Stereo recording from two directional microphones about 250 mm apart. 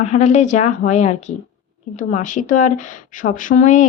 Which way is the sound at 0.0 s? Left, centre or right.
Left.